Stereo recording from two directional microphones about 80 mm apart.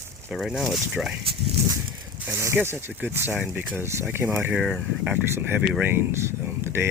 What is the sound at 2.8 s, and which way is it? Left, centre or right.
Speech, right.